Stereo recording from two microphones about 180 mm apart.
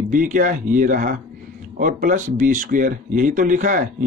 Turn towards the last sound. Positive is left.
turn(degrees=-45)  # may be behind; listen again after turning